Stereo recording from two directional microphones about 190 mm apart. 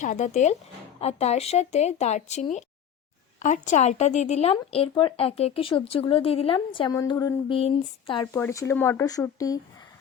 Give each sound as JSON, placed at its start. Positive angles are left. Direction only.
{"t": 0.0, "sound": "speech", "side_deg": 40}